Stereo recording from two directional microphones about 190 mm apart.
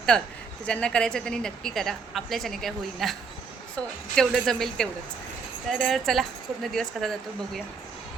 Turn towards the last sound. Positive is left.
turn(degrees=0)  # may be behind; listen again after turning